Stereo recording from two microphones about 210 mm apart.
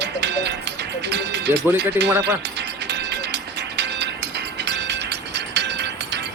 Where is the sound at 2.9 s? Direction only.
55° right (ahead or behind).